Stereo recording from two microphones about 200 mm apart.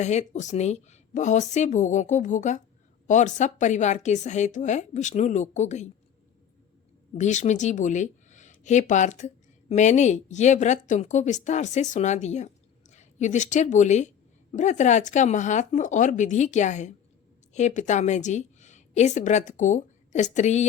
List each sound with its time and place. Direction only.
0.0 s a woman's voice: 35° left (ahead or behind)
7.2 s a woman's voice: 35° left (ahead or behind)